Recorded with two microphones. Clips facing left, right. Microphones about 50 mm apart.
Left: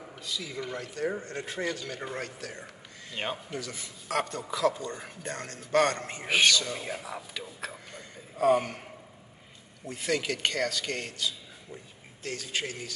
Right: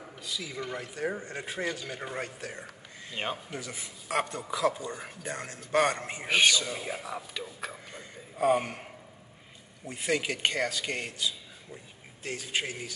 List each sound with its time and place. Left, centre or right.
0.0 s speech: centre
2.1 s speech: centre
7.9 s a sound: centre
9.8 s speech: centre